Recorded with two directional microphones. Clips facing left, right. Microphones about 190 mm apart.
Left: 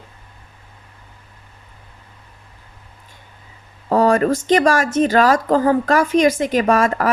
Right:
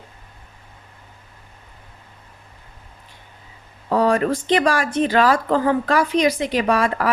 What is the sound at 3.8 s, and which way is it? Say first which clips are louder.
A woman's voice: left 3 dB; 45° left (ahead or behind).